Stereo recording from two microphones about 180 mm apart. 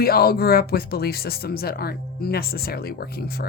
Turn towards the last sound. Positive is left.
turn(degrees=60)  # may be behind; listen again after turning